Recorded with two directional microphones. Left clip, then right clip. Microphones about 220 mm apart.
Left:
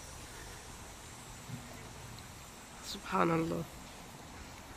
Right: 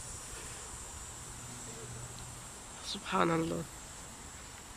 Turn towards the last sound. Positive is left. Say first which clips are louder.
# right 1 dB
turn(degrees=0)  # may be behind; listen again after turning